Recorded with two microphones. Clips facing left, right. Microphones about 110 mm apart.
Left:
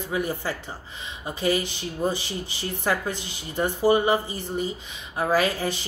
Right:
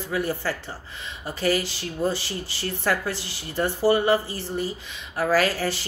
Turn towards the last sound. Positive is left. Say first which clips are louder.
# right 1 dB
turn(degrees=20)  # may be behind; listen again after turning